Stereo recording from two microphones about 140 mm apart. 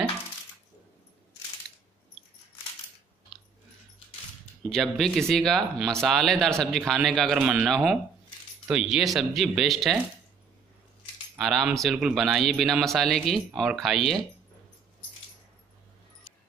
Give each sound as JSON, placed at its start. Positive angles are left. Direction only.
{"t": 4.6, "sound": "a man's voice", "side_deg": 5}
{"t": 11.3, "sound": "a man's voice", "side_deg": 0}